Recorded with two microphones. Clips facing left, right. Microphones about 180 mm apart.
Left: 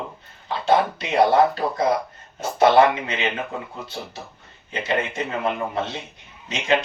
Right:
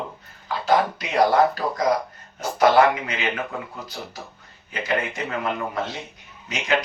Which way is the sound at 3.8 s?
25° left (ahead or behind).